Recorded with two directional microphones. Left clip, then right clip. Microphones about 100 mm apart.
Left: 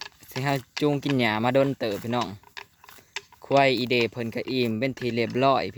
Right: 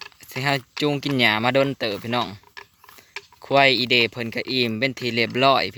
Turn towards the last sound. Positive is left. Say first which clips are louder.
# right 4 dB
turn(degrees=5)  # may be behind; listen again after turning